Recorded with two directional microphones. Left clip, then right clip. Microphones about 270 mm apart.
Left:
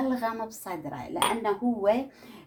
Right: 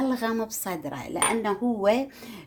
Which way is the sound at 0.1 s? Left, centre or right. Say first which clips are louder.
Right 2 dB; right.